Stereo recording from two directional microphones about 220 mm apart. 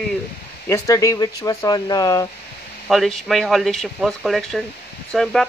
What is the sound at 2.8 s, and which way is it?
Speech, centre (ahead or behind).